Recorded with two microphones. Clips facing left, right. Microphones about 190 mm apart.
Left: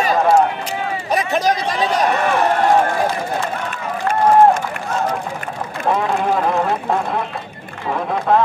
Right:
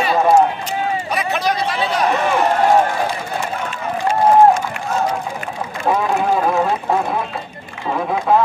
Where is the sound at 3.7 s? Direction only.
55° left (ahead or behind).